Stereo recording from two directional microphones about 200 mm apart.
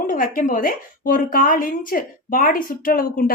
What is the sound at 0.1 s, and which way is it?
Speech, 40° left (ahead or behind).